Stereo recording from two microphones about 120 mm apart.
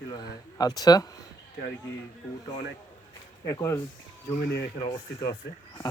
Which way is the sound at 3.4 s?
30° left (ahead or behind).